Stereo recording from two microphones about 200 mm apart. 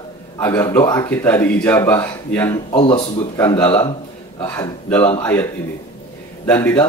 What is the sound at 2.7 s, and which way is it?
Speech, 30° left (ahead or behind).